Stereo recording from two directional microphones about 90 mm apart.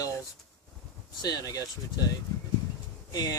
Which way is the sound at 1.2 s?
45° left (ahead or behind).